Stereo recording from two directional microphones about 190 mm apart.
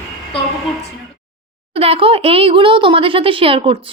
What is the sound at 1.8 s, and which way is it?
Speech, 30° right (ahead or behind).